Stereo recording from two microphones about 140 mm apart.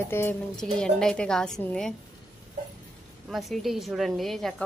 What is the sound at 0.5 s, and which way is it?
A woman's voice, 5° left (ahead or behind).